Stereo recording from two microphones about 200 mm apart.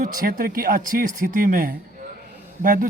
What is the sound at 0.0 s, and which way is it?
Speech, 45° right (ahead or behind).